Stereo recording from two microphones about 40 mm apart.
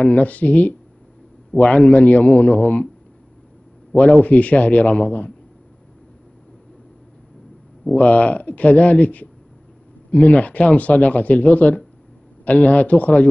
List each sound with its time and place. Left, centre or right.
0.0 s speech: left
3.9 s speech: left
7.9 s speech: left